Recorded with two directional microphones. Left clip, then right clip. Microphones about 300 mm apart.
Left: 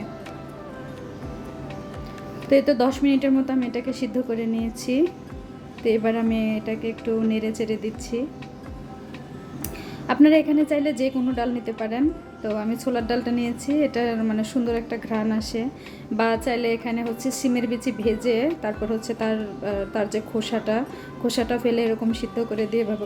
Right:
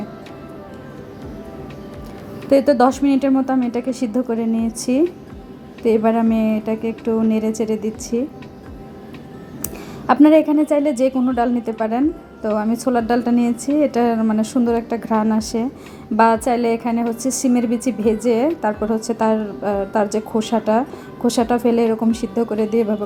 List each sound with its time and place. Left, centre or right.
2.5 s a woman's voice: centre
10.1 s a woman's voice: centre